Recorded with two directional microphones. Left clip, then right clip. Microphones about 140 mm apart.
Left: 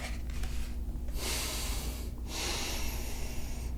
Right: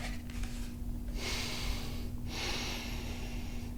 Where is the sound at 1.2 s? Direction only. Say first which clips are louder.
Left 2 dB; 15° right (ahead or behind).